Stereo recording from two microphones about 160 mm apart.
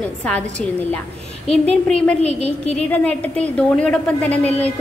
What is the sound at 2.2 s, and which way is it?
Speech, 40° left (ahead or behind).